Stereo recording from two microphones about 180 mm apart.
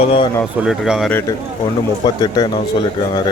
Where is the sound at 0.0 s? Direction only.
30° left (ahead or behind).